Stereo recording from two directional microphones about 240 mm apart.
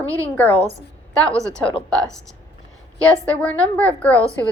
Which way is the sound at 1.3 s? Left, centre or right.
Centre.